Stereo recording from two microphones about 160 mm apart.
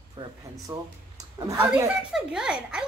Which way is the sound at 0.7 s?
20° right (ahead or behind).